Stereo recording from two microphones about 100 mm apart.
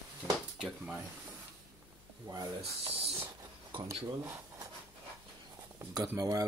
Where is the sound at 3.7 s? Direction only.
70° right (ahead or behind).